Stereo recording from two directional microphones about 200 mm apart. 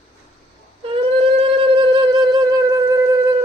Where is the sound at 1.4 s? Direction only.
25° right (ahead or behind).